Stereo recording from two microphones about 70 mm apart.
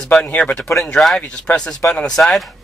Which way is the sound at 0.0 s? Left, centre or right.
Centre.